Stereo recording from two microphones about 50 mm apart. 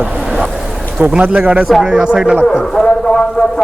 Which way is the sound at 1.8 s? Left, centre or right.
Centre.